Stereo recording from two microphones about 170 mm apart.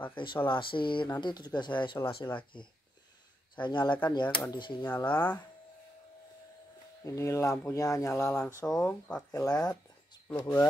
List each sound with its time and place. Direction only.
0.1 s speech: 30° left (ahead or behind)
3.6 s speech: 25° left (ahead or behind)
5.0 s speech: 10° left (ahead or behind)
7.1 s speech: 15° left (ahead or behind)
9.3 s speech: 20° left (ahead or behind)